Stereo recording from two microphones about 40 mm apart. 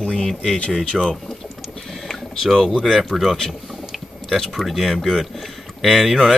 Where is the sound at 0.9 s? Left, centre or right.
Centre.